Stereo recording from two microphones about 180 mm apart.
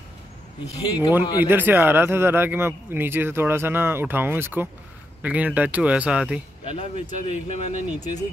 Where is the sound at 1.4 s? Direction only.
10° right (ahead or behind).